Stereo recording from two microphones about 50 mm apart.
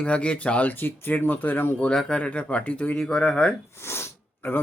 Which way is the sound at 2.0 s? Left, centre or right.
Left.